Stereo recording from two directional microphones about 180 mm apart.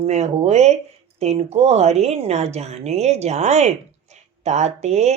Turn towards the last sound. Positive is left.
turn(degrees=-40)  # may be behind; listen again after turning